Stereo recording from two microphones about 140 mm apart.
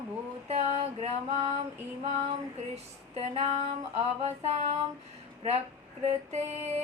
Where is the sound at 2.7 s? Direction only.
50° right (ahead or behind).